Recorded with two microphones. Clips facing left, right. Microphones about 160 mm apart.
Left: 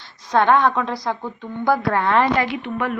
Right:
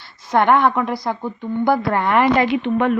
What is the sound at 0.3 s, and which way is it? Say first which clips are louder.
A woman's voice: right 1 dB; 15° right (ahead or behind).